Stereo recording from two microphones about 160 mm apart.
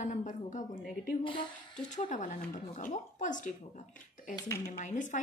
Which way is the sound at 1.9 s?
50° left (ahead or behind).